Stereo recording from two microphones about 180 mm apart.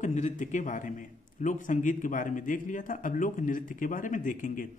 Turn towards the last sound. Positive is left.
turn(degrees=45)  # may be behind; listen again after turning